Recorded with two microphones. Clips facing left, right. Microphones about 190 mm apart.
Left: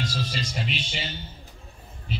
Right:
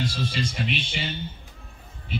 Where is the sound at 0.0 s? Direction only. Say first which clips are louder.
Right 3 dB; 55° right (ahead or behind).